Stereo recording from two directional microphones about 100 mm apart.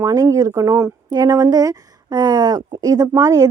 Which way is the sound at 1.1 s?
40° right (ahead or behind).